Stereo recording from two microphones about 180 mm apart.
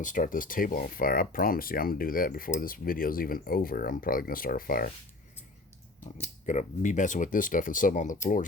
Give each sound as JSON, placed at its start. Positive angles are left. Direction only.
{"t": 0.0, "sound": "speech", "side_deg": 45}
{"t": 6.4, "sound": "speech", "side_deg": 45}